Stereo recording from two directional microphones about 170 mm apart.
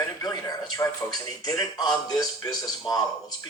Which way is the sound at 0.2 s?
20° left (ahead or behind).